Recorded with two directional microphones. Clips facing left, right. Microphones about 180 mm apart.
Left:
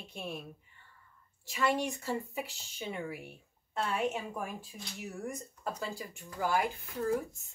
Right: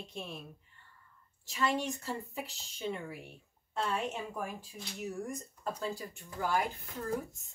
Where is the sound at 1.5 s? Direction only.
10° left (ahead or behind).